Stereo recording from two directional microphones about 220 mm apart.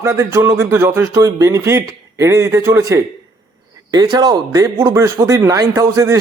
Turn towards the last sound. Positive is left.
turn(degrees=-15)  # may be behind; listen again after turning